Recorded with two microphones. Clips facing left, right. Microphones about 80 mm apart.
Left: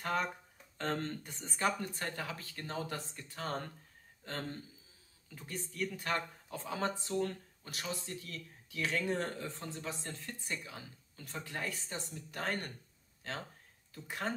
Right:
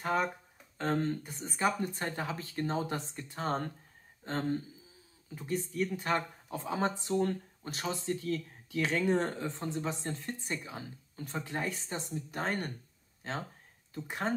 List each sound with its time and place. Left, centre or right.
0.0 s speech: centre
13.9 s speech: right